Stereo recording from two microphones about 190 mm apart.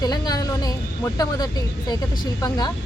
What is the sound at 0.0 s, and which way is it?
Speech, 20° left (ahead or behind).